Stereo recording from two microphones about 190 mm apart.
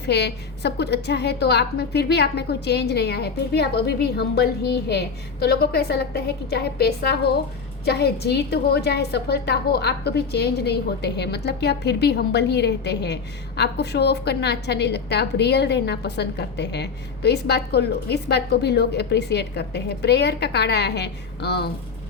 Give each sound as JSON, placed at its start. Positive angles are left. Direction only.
{"t": 0.0, "sound": "a woman's voice", "side_deg": 60}